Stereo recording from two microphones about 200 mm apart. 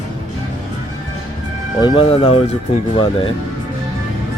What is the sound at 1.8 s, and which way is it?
Speech, 25° left (ahead or behind).